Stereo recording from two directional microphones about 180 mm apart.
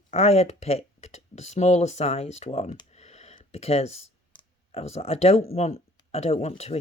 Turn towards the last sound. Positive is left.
turn(degrees=35)  # may be behind; listen again after turning